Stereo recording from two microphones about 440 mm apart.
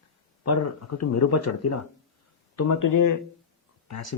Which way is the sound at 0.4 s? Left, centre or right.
Left.